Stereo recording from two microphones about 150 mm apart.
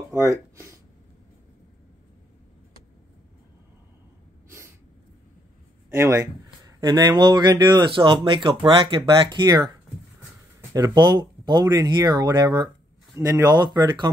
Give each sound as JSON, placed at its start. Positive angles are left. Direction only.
{"t": 0.1, "sound": "speech", "side_deg": -20}
{"t": 4.5, "sound": "sneeze", "side_deg": -20}
{"t": 5.9, "sound": "a sound", "side_deg": -20}
{"t": 6.8, "sound": "speech", "side_deg": -30}
{"t": 10.7, "sound": "speech", "side_deg": -25}